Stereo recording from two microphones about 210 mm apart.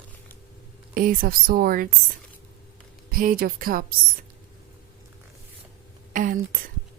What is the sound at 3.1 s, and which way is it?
Speech, 45° right (ahead or behind).